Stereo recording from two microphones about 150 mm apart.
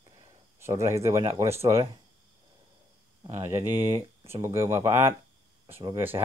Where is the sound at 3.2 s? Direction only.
20° right (ahead or behind).